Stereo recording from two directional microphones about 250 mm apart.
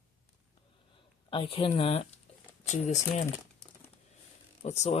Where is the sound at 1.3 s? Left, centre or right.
Left.